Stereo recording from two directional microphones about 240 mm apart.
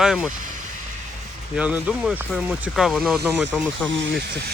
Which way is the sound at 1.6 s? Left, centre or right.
Centre.